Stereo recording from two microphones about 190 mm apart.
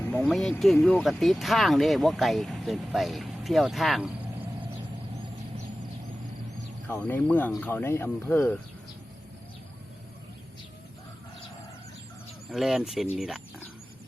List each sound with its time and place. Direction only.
0.0 s speech: 10° left (ahead or behind)
6.8 s speech: 10° left (ahead or behind)
12.5 s speech: centre (ahead or behind)